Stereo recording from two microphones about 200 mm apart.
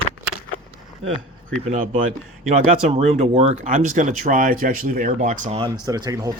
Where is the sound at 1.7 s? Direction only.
40° right (ahead or behind).